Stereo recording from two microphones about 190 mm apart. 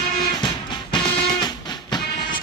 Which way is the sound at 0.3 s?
25° left (ahead or behind).